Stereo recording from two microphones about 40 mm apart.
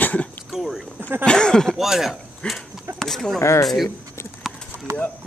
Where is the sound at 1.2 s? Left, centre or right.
Left.